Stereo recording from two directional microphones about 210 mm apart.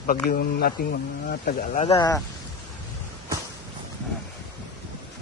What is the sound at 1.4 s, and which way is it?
Speech, 35° left (ahead or behind).